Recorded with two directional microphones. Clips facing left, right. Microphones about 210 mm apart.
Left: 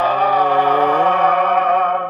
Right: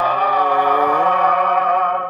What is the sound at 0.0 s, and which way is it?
Music, 30° left (ahead or behind).